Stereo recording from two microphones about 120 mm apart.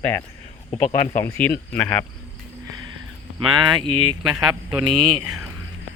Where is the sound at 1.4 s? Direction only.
15° left (ahead or behind).